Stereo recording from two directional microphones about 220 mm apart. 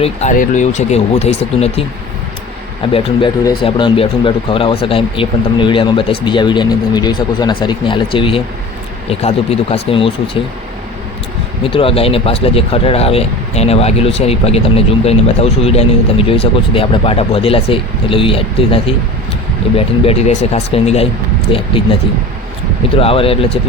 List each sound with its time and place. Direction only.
0.0 s speech: 30° left (ahead or behind)
2.9 s speech: 20° left (ahead or behind)
11.6 s speech: 25° left (ahead or behind)
23.0 s speech: 25° left (ahead or behind)